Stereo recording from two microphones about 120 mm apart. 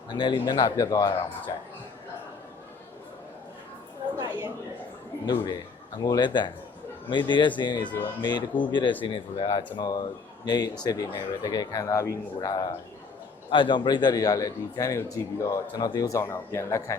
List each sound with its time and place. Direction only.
0.1 s speech: 40° left (ahead or behind)
5.2 s speech: 35° left (ahead or behind)
13.5 s a man's voice: 45° left (ahead or behind); by 17.0 s 25° left (ahead or behind)